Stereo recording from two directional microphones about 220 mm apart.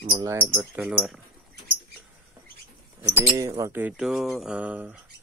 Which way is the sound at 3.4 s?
15° right (ahead or behind).